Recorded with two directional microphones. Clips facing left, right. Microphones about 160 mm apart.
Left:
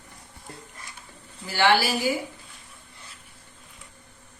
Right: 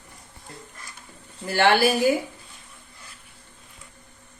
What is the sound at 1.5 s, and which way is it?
Speech, 55° right (ahead or behind).